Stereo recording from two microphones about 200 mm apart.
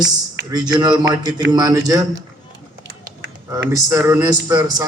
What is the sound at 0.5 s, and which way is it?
Speech, 20° right (ahead or behind).